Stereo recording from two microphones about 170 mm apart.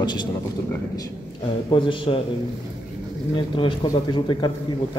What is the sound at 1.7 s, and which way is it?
Speech, 30° left (ahead or behind).